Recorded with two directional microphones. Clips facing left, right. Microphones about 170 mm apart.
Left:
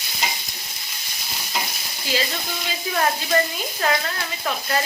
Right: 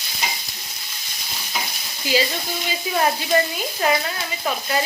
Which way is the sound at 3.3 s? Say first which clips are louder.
Right 2 dB; 15° right (ahead or behind).